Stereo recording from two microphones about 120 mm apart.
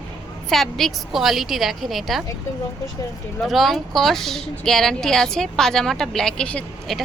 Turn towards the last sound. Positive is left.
turn(degrees=5)  # may be behind; listen again after turning